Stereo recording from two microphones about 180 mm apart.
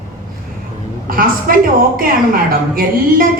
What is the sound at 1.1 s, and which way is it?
A woman's voice, 50° right (ahead or behind).